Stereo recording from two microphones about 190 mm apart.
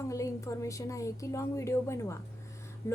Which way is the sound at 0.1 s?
15° left (ahead or behind).